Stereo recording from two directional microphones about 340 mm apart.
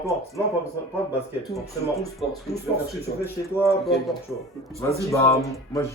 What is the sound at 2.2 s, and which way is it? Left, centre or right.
Speech, centre.